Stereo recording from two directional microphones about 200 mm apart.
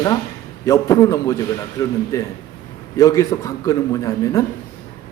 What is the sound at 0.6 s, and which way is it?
A man's voice, 15° left (ahead or behind).